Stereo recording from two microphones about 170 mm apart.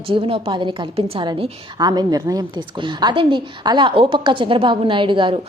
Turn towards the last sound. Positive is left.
turn(degrees=-30)  # may be behind; listen again after turning